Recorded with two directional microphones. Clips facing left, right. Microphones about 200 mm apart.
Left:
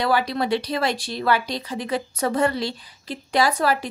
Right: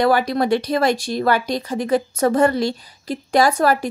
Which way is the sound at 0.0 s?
45° right (ahead or behind).